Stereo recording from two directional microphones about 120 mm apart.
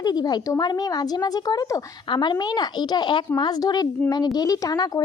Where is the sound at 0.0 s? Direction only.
35° left (ahead or behind).